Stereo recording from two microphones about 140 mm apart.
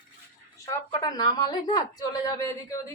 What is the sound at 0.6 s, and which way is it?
A woman's voice, 30° left (ahead or behind).